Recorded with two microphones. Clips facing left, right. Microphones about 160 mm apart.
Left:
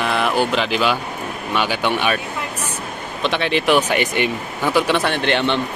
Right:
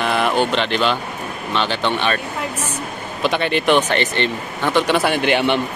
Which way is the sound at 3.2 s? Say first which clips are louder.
Right 1 dB; centre (ahead or behind).